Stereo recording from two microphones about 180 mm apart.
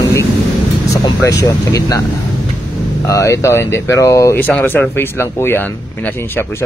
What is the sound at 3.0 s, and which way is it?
A man's voice, 20° left (ahead or behind).